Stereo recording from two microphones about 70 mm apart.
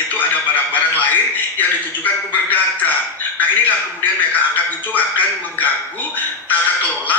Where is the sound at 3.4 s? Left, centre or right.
Left.